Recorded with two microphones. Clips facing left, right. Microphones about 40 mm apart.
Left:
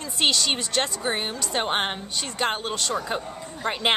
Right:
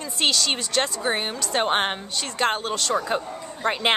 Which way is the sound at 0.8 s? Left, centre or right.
Centre.